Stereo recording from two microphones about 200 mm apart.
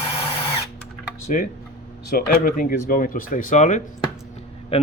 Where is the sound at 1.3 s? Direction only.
40° left (ahead or behind).